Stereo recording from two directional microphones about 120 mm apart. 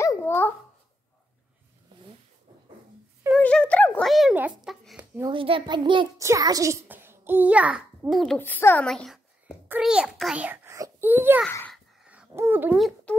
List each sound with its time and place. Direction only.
0.0 s a sound: 25° left (ahead or behind)
3.3 s a sound: 10° left (ahead or behind)
4.0 s a sound: centre (ahead or behind)
4.3 s a child's voice: 10° right (ahead or behind)
5.3 s a child's voice: 45° right (ahead or behind)
6.1 s a child's voice: 25° right (ahead or behind)
6.9 s a child's voice: 20° right (ahead or behind); by 8.4 s centre (ahead or behind)
8.4 s a child's voice: 20° left (ahead or behind)
8.8 s a child's voice: 5° left (ahead or behind)
9.7 s a child's voice: 5° right (ahead or behind)
10.4 s whispering: 20° right (ahead or behind)
11.1 s a child's voice: 15° right (ahead or behind)
11.7 s dog: 5° right (ahead or behind)
12.4 s a child's voice: 15° right (ahead or behind)